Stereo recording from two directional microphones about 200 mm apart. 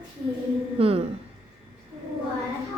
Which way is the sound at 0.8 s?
30° right (ahead or behind).